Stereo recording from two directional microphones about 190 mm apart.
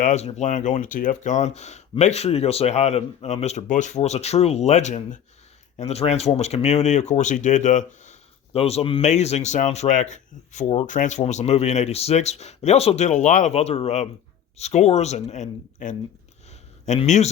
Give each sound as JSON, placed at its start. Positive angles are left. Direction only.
{"t": 0.0, "sound": "speech", "side_deg": 35}